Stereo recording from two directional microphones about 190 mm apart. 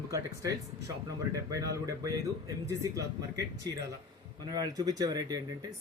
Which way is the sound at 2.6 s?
15° right (ahead or behind).